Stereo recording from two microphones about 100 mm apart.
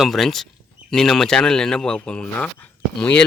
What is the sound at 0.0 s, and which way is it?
Speech, centre (ahead or behind).